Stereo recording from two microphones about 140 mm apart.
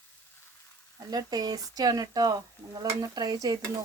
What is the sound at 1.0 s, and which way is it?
Speech, 25° right (ahead or behind).